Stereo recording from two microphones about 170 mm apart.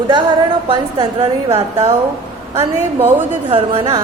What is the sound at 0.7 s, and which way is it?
Speech, 30° right (ahead or behind).